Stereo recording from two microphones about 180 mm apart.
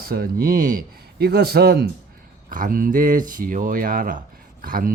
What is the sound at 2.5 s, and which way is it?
Speech, 50° right (ahead or behind).